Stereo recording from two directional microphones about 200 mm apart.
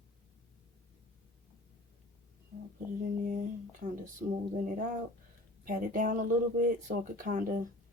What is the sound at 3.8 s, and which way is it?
Speech, 40° right (ahead or behind).